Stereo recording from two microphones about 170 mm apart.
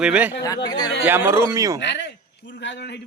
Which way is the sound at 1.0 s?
15° right (ahead or behind).